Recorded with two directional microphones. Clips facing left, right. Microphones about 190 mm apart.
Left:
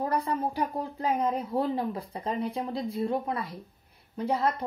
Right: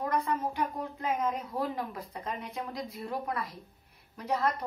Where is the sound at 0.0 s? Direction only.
35° left (ahead or behind).